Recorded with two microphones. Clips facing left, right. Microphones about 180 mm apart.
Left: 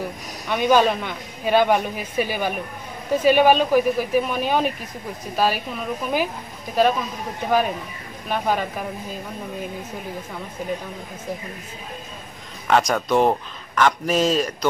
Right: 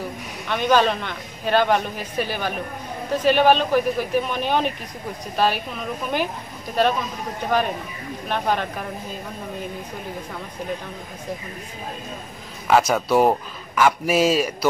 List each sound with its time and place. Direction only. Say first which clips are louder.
0.5 s a man's voice: left 1 dB; 10° left (ahead or behind)
6.7 s a man's voice: left 1 dB; 5° left (ahead or behind)
12.6 s a man's voice: right 1 dB; 5° right (ahead or behind)